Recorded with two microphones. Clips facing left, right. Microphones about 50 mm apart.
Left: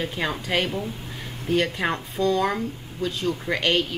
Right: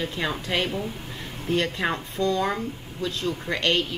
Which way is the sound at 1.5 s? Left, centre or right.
Centre.